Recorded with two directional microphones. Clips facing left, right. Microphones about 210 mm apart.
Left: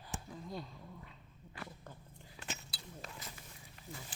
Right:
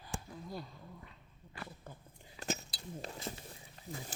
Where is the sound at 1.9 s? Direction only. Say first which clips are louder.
Right 1 dB; 10° right (ahead or behind).